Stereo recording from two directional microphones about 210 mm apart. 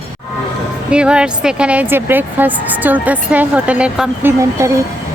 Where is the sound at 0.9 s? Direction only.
5° right (ahead or behind).